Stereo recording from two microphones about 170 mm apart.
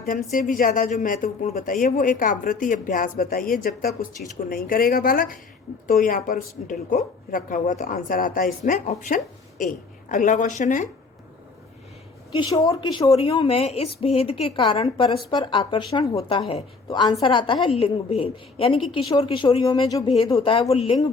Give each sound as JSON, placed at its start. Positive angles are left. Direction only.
{"t": 0.3, "sound": "a woman's voice", "side_deg": 55}
{"t": 12.4, "sound": "a woman's voice", "side_deg": 25}
{"t": 18.8, "sound": "a woman's voice", "side_deg": 0}
{"t": 19.2, "sound": "a woman's voice", "side_deg": 30}